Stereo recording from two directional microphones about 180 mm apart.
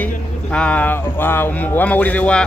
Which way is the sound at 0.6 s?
5° left (ahead or behind).